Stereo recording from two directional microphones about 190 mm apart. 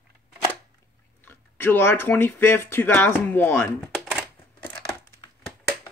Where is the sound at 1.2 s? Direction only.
10° left (ahead or behind).